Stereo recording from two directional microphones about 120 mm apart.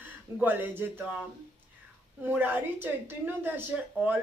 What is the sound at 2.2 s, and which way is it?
A woman's voice, 15° right (ahead or behind).